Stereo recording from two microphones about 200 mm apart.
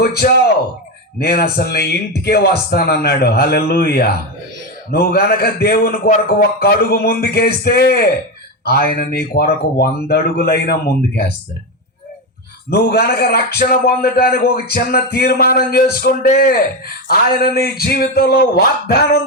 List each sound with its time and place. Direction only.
0.0 s a man's voice: 50° left (ahead or behind)
12.7 s a man's voice: 55° left (ahead or behind)